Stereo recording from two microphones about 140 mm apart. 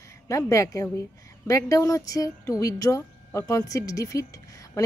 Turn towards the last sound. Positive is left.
turn(degrees=25)  # may be behind; listen again after turning